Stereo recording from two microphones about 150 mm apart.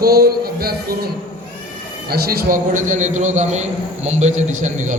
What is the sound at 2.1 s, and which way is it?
Speech, 90° right.